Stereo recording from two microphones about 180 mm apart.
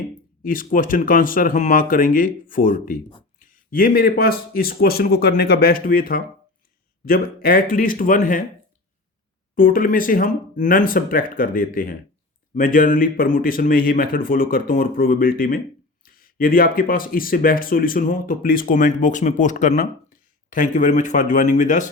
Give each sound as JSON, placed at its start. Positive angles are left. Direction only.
{"t": 0.4, "sound": "speech", "side_deg": 50}
{"t": 9.6, "sound": "speech", "side_deg": 50}